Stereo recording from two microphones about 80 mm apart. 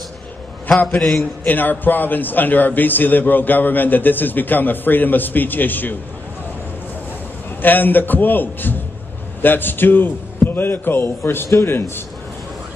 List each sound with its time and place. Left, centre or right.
0.9 s a man's voice: centre
1.4 s a man's voice: left
7.6 s a man's voice: left